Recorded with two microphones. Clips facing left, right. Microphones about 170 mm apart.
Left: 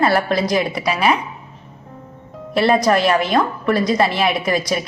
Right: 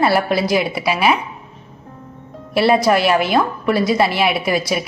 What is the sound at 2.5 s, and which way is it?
A woman's voice, 5° right (ahead or behind).